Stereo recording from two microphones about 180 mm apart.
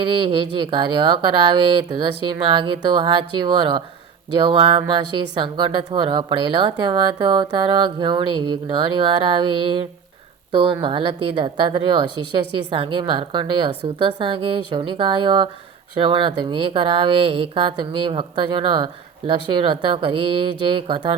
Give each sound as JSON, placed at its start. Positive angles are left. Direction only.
{"t": 0.3, "sound": "a woman's voice", "side_deg": -30}